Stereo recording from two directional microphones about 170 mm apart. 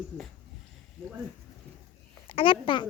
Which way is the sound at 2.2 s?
30° left (ahead or behind).